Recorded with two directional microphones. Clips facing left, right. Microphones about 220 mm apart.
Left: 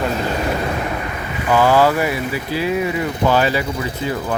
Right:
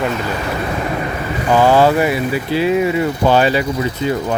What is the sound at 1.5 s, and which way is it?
Speech, 25° right (ahead or behind).